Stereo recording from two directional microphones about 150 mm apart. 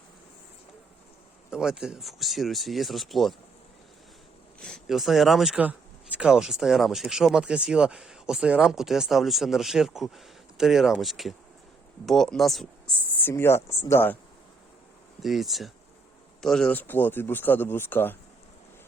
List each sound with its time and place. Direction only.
1.5 s speech: 5° right (ahead or behind)
4.6 s speech: centre (ahead or behind)
13.1 s speech: 15° left (ahead or behind)
15.2 s speech: centre (ahead or behind)